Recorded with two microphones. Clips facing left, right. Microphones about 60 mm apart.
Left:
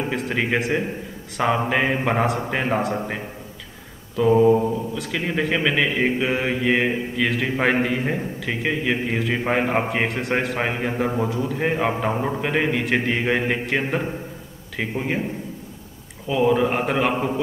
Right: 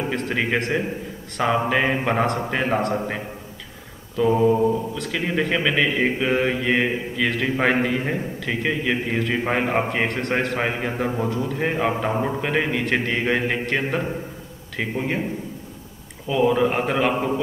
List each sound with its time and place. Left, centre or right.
0.1 s speech: centre
4.2 s speech: centre
16.3 s speech: centre